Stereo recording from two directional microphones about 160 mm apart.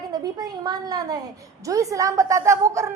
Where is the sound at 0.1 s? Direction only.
25° right (ahead or behind).